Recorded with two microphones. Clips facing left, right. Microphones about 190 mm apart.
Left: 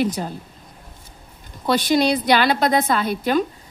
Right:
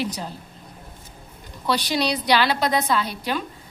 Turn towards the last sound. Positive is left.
turn(degrees=50)  # may be behind; listen again after turning